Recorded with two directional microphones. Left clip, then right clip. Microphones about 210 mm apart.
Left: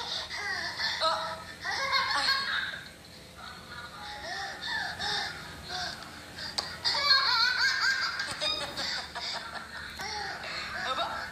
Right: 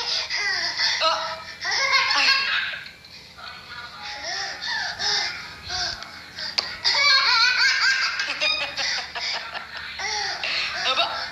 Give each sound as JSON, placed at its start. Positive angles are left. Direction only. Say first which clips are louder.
{"t": 0.0, "sound": "baby laughter", "louder": "right 10 dB", "side_deg": -35}
{"t": 4.1, "sound": "a sound", "louder": "right 8 dB", "side_deg": -35}
{"t": 6.4, "sound": "music", "louder": "right 8 dB", "side_deg": -35}